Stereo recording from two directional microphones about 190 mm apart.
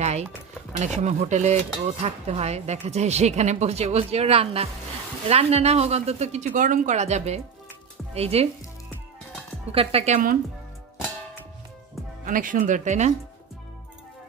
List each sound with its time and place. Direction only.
0.7 s speech: 35° right (ahead or behind)
9.7 s speech: 30° right (ahead or behind)
12.3 s speech: 45° right (ahead or behind)